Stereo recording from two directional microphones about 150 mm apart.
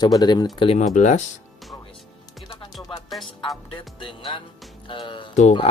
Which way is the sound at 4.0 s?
35° left (ahead or behind).